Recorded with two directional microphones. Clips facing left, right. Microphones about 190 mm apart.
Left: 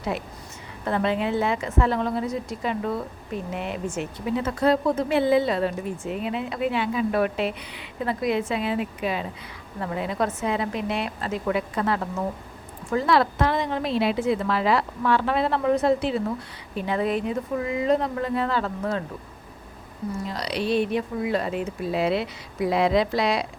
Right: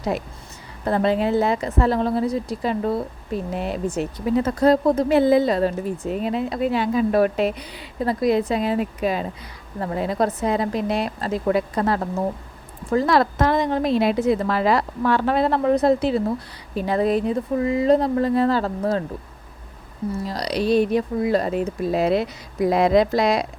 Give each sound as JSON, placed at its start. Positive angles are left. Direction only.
{"t": 0.1, "sound": "a woman's voice", "side_deg": -40}
{"t": 20.2, "sound": "a woman's voice", "side_deg": -35}